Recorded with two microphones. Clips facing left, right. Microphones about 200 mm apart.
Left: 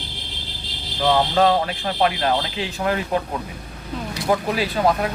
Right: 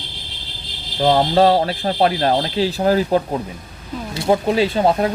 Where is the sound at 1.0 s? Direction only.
30° right (ahead or behind).